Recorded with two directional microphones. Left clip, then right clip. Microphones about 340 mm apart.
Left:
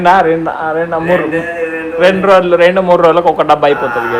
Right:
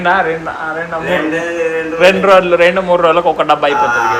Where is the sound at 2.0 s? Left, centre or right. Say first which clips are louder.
Even; centre.